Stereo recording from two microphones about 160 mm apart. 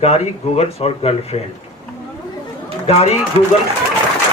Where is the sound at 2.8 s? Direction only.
40° left (ahead or behind).